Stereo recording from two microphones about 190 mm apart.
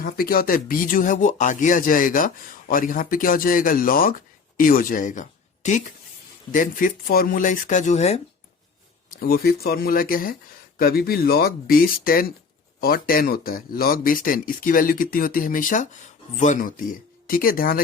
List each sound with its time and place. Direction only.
0.0 s speech: 50° left (ahead or behind)
9.0 s speech: 55° left (ahead or behind)